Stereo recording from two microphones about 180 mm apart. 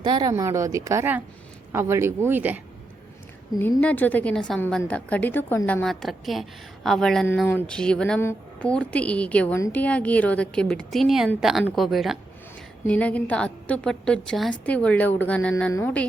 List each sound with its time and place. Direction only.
0.0 s speech: 25° right (ahead or behind)
3.6 s a woman's voice: 10° left (ahead or behind)